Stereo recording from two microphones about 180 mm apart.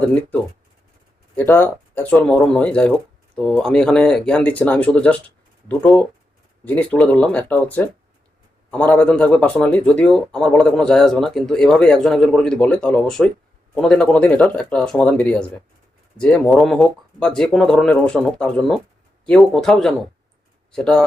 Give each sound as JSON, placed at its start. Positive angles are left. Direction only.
{"t": 0.0, "sound": "speech", "side_deg": 10}
{"t": 1.4, "sound": "speech", "side_deg": 10}